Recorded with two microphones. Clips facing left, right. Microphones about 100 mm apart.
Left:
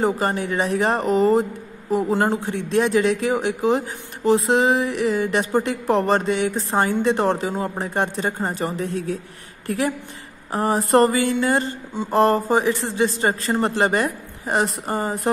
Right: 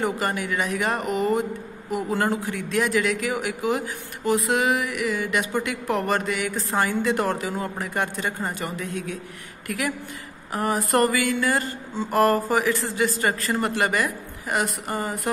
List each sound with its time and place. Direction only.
0.0 s a man's voice: 30° left (ahead or behind)